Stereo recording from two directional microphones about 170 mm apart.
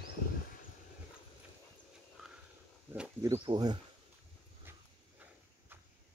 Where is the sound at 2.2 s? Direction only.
Centre (ahead or behind).